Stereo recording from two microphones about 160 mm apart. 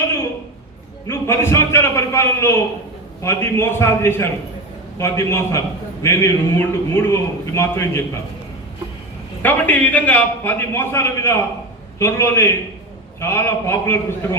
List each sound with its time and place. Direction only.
1.0 s a man's voice: 15° left (ahead or behind)
9.4 s a man's voice: 10° left (ahead or behind)